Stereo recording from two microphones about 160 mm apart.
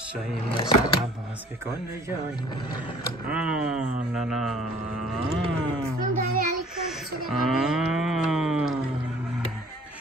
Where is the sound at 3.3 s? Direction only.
5° right (ahead or behind).